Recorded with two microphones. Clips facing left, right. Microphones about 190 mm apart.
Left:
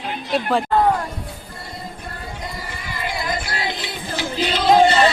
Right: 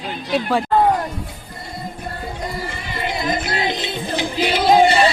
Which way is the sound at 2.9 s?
25° right (ahead or behind).